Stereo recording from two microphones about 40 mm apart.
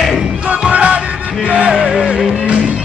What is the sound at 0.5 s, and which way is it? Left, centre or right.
Music, right.